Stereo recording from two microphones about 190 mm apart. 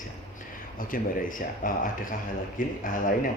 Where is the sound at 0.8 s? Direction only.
45° left (ahead or behind).